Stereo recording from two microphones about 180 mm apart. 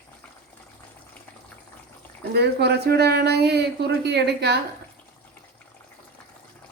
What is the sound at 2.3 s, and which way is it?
Speech, 65° right (ahead or behind).